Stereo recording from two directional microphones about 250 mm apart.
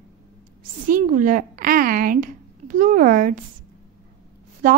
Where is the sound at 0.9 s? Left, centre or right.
Right.